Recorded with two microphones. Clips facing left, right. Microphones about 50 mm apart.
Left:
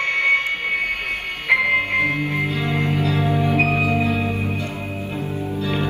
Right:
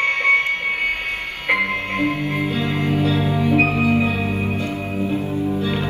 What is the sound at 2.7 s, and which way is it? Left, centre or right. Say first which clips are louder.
Music: right 2 dB; left.